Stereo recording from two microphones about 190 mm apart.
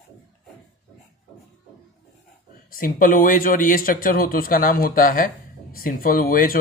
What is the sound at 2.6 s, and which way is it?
Speech, 45° left (ahead or behind).